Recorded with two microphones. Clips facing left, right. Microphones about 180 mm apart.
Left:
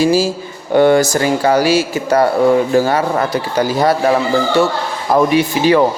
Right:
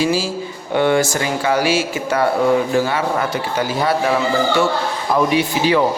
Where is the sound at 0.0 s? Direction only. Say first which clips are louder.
Left 5 dB; 40° left (ahead or behind).